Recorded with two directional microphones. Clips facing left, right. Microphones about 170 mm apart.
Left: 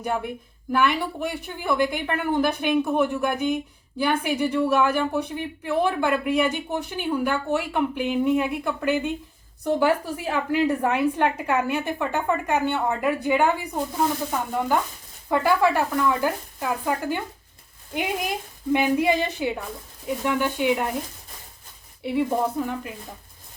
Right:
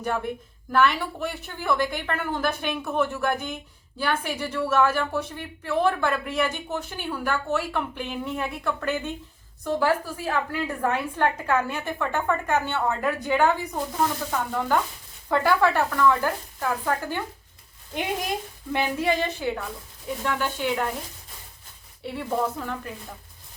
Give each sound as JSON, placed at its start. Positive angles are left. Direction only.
{"t": 0.7, "sound": "speech", "side_deg": 15}
{"t": 18.7, "sound": "speech", "side_deg": 15}
{"t": 22.0, "sound": "speech", "side_deg": 15}